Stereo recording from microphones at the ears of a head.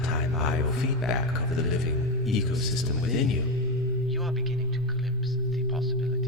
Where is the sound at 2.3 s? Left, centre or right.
Left.